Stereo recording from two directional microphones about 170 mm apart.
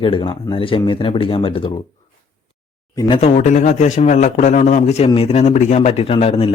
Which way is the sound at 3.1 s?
40° left (ahead or behind).